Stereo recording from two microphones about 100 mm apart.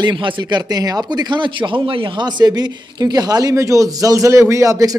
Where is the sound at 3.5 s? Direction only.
30° right (ahead or behind).